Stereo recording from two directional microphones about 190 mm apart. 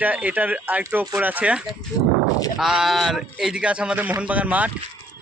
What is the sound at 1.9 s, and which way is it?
Speech, 20° left (ahead or behind).